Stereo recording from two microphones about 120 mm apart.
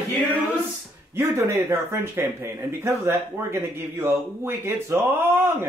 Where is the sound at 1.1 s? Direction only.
20° right (ahead or behind).